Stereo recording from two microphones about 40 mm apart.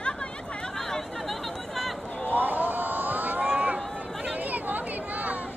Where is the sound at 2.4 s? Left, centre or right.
Right.